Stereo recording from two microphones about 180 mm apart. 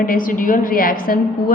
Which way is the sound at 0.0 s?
50° left (ahead or behind).